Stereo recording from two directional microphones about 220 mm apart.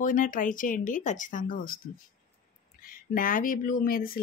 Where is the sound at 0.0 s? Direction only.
35° left (ahead or behind).